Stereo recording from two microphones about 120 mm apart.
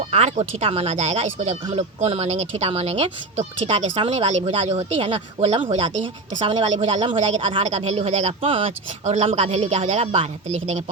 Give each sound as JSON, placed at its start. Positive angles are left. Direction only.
{"t": 0.1, "sound": "speech", "side_deg": -60}
{"t": 7.6, "sound": "speech", "side_deg": -65}
{"t": 8.4, "sound": "speech", "side_deg": -45}
{"t": 9.0, "sound": "speech", "side_deg": -70}